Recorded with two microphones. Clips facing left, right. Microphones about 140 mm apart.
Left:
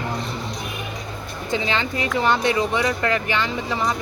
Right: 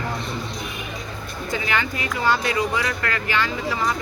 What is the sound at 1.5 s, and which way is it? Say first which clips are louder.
Speech: left 2 dB; 20° left (ahead or behind).